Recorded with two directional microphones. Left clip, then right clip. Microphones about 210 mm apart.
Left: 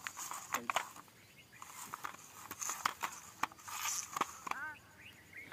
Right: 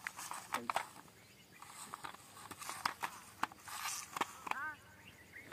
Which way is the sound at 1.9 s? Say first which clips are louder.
Left 3 dB; 5° left (ahead or behind).